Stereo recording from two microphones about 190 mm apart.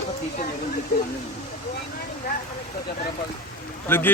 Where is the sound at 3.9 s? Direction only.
10° left (ahead or behind).